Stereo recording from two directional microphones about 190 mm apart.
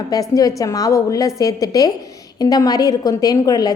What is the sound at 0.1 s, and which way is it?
A woman's voice, 20° left (ahead or behind).